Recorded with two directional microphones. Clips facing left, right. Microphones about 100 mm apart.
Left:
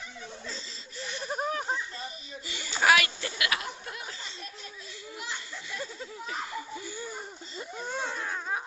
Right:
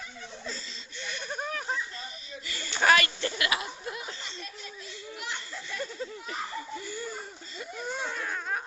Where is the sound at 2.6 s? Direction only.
10° left (ahead or behind).